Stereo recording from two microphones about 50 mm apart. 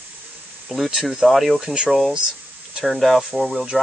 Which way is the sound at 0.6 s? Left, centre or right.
Centre.